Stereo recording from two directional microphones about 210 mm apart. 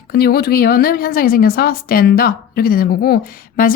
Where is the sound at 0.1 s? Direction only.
50° left (ahead or behind).